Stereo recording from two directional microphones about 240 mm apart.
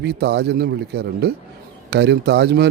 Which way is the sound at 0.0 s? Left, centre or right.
Right.